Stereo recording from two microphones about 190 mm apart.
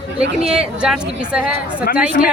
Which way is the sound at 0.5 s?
5° right (ahead or behind).